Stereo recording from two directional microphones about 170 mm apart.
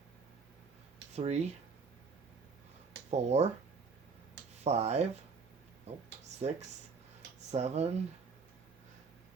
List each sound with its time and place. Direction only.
1.1 s speech: 40° right (ahead or behind)
3.1 s speech: 40° right (ahead or behind)
4.6 s speech: 40° right (ahead or behind)
7.5 s speech: 40° right (ahead or behind)